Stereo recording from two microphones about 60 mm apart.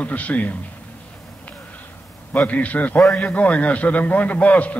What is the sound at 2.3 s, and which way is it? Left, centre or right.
A man's voice, left.